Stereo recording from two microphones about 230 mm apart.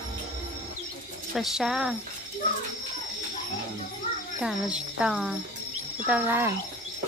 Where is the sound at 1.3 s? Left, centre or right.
Centre.